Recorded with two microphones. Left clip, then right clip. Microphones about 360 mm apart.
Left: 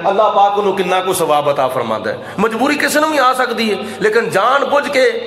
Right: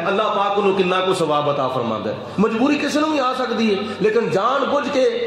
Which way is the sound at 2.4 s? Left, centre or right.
Left.